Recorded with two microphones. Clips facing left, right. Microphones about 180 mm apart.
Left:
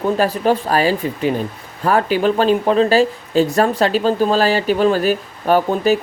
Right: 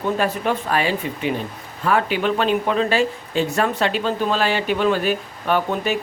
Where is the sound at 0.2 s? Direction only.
35° left (ahead or behind).